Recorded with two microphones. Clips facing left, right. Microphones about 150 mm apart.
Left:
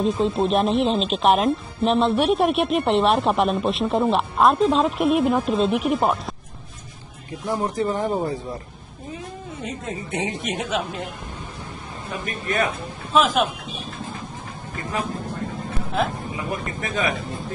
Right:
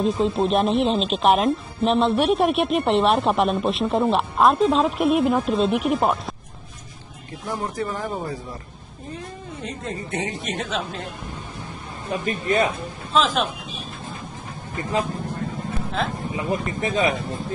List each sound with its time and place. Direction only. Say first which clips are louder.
0.0 s speech: even; centre (ahead or behind)
7.4 s speech: left 4 dB; 20° left (ahead or behind)
9.6 s speech: even; 5° left (ahead or behind)
10.1 s speech: left 2 dB; 20° left (ahead or behind)
12.3 s speech: right 3 dB; 30° right (ahead or behind)
13.1 s speech: left 2 dB; 10° left (ahead or behind)
16.3 s speech: right 6 dB; 30° right (ahead or behind)